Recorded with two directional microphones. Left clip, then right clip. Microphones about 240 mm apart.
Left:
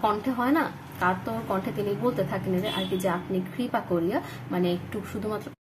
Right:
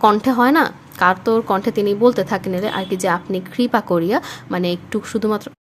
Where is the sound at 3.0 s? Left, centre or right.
Right.